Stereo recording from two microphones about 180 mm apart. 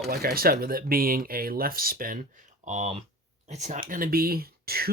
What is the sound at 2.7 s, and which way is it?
Speech, 40° right (ahead or behind).